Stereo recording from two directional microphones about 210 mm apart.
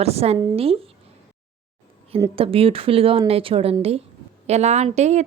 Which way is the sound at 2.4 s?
25° right (ahead or behind).